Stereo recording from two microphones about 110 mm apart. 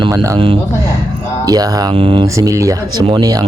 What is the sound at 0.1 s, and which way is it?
Speech, 30° right (ahead or behind).